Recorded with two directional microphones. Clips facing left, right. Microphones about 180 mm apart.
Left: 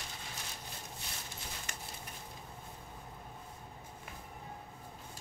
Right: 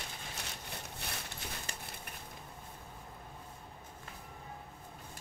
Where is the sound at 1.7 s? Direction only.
30° right (ahead or behind).